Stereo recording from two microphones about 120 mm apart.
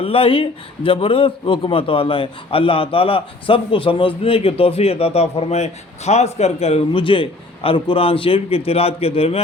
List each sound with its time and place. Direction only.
0.0 s speech: 50° left (ahead or behind)